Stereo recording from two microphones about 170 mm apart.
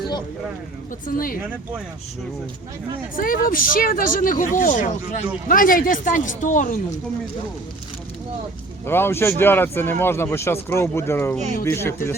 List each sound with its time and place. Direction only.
1.0 s speech: 55° left (ahead or behind)
3.2 s speech: 55° left (ahead or behind)
8.9 s speech: 15° left (ahead or behind)